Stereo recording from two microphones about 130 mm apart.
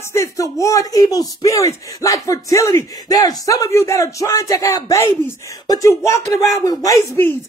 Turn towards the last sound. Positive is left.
turn(degrees=20)  # may be behind; listen again after turning